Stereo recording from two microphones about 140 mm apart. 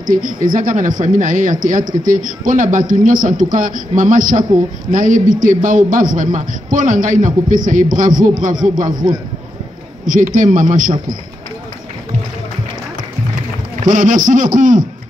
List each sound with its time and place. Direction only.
0.0 s a man's voice: 75° right (ahead or behind)
8.8 s a man's voice: 30° right (ahead or behind)
10.0 s a man's voice: 70° right (ahead or behind)
13.7 s a man's voice: 65° right (ahead or behind)